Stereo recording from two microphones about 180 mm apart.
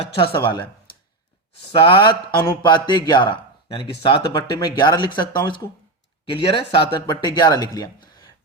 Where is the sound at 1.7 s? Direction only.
25° left (ahead or behind).